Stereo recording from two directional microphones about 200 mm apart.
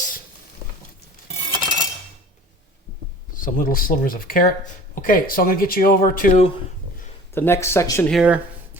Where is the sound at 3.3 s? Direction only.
45° left (ahead or behind).